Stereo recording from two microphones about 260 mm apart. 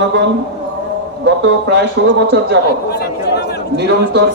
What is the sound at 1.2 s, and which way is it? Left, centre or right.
A man's voice, right.